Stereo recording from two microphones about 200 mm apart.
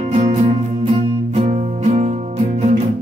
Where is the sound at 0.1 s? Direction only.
35° right (ahead or behind).